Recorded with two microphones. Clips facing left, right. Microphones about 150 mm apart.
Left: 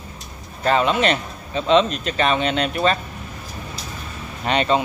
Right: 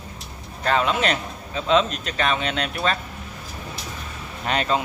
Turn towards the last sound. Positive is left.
turn(degrees=0)  # may be behind; listen again after turning